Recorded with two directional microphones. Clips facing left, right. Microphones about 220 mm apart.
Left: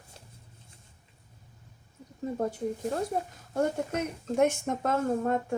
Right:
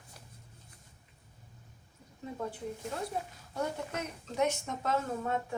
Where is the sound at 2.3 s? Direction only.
40° left (ahead or behind).